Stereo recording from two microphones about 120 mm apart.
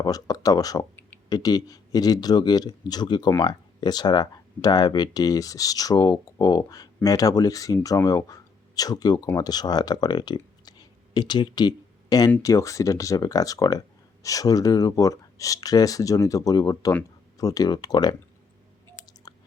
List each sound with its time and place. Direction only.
0.0 s speech: 30° left (ahead or behind)
19.3 s chewing: 35° left (ahead or behind)